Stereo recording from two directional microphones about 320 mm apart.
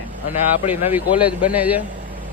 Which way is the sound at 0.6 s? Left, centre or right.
Centre.